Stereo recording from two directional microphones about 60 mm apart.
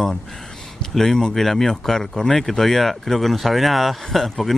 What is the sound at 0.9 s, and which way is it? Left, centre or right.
Speech, centre.